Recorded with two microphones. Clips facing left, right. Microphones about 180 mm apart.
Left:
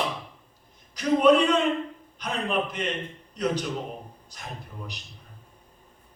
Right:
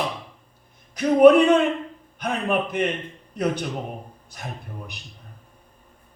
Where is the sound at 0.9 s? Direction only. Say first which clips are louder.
Right 6 dB; 55° right (ahead or behind).